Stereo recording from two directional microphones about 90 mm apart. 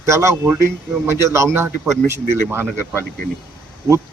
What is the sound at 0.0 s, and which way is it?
A man's voice, 30° right (ahead or behind).